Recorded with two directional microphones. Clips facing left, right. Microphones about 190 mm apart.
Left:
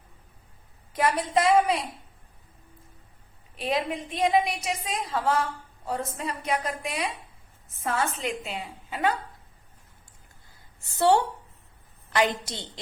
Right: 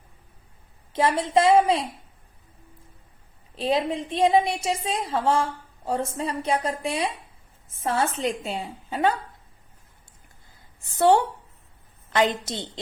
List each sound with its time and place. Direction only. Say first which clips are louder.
0.9 s a woman's voice: right 3 dB; 25° right (ahead or behind)
3.5 s a woman's voice: right 4 dB; 30° right (ahead or behind)
10.8 s a woman's voice: right 3 dB; 20° right (ahead or behind)